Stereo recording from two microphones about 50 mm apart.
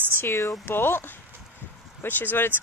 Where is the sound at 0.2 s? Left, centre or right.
Left.